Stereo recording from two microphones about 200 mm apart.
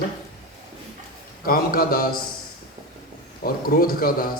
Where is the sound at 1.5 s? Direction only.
45° left (ahead or behind).